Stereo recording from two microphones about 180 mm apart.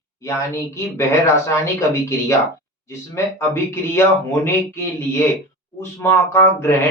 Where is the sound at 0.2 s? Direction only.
15° left (ahead or behind).